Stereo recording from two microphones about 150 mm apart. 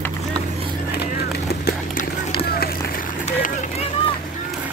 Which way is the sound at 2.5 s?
90° left.